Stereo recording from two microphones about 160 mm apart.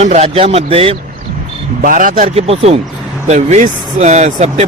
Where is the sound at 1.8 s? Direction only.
55° right (ahead or behind).